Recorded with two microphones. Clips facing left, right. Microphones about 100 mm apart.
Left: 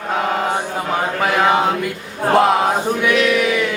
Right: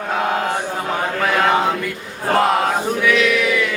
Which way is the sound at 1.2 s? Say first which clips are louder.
Left 1 dB; 10° left (ahead or behind).